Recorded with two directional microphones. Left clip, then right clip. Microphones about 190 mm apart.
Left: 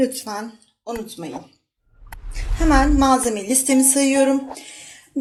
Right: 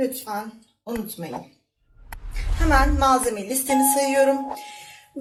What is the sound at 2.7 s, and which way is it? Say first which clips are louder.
A woman's voice: left 2 dB; 50° left (ahead or behind).